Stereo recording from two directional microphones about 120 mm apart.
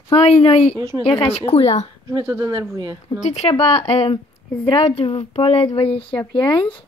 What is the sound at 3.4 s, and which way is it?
A woman's voice, 50° left (ahead or behind).